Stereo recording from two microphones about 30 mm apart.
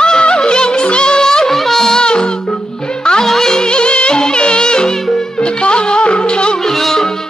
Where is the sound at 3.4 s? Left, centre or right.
Left.